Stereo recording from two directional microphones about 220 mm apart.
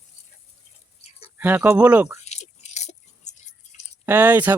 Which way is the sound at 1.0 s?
30° left (ahead or behind).